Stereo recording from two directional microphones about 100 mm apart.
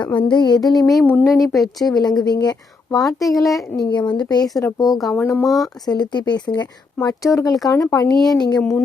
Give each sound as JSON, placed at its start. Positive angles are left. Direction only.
{"t": 0.2, "sound": "speech", "side_deg": 50}
{"t": 1.0, "sound": "speech", "side_deg": 20}
{"t": 1.4, "sound": "speech", "side_deg": 0}
{"t": 1.9, "sound": "speech", "side_deg": 45}
{"t": 3.3, "sound": "speech", "side_deg": 0}
{"t": 3.8, "sound": "speech", "side_deg": 40}
{"t": 4.9, "sound": "speech", "side_deg": 0}
{"t": 5.8, "sound": "speech", "side_deg": 45}